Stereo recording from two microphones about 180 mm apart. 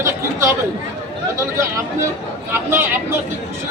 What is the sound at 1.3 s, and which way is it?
Speech, 15° right (ahead or behind).